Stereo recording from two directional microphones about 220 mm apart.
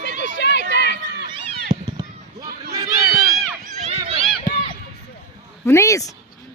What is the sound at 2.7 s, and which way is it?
Crowd, 15° right (ahead or behind).